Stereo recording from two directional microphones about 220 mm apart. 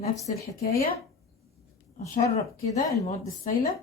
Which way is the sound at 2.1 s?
30° left (ahead or behind).